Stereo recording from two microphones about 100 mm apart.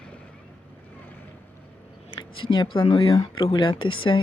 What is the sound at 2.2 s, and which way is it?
Speech, 55° left (ahead or behind).